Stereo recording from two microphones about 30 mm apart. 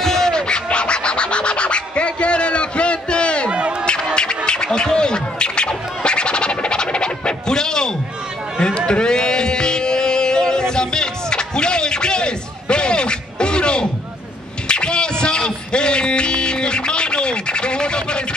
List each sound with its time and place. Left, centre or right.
0.0 s scratching: centre
0.3 s scratching: left
0.7 s music: left
3.4 s a sound: right
3.8 s music: left
8.5 s a sound: left
14.7 s music: left